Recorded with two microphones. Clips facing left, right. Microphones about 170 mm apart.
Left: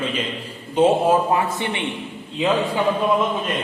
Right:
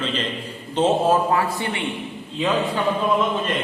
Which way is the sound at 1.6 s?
20° left (ahead or behind).